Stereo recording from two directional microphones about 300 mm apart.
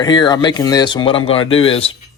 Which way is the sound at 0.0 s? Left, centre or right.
Centre.